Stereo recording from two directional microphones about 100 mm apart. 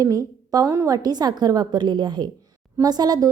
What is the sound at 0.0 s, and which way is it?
A woman's voice, 35° right (ahead or behind).